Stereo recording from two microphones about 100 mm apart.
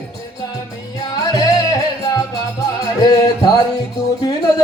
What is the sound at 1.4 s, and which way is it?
Music, 40° left (ahead or behind).